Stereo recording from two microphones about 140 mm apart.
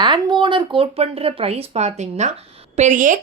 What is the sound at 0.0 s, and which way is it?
Speech, 30° right (ahead or behind).